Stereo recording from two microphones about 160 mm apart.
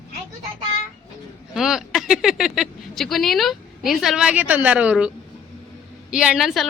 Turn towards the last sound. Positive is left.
turn(degrees=0)  # may be behind; listen again after turning